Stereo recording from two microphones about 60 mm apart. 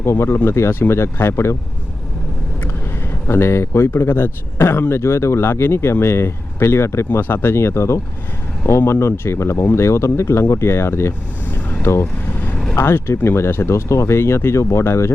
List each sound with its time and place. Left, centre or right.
0.0 s speech: left
3.2 s speech: left